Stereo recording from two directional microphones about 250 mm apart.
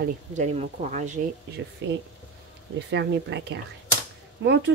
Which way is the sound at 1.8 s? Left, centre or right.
Right.